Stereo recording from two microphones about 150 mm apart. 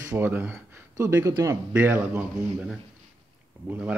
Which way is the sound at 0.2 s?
15° right (ahead or behind).